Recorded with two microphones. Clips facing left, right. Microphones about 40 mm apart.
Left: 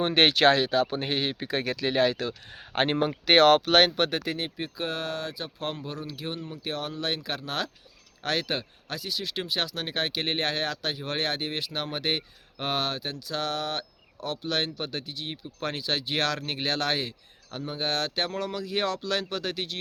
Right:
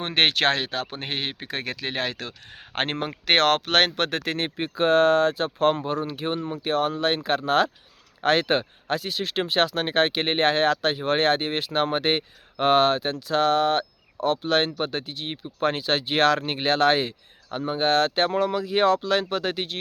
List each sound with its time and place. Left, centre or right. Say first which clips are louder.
0.0 s speech: left 1 dB; right
3.2 s speech: left 2 dB; right
4.5 s speech: right 12 dB; right